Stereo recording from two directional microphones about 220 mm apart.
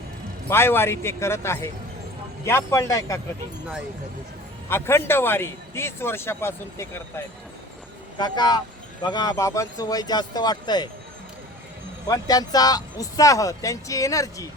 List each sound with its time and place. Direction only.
0.5 s speech: 10° left (ahead or behind)
4.7 s speech: 10° left (ahead or behind)
8.2 s speech: 20° left (ahead or behind)
12.0 s speech: 15° left (ahead or behind)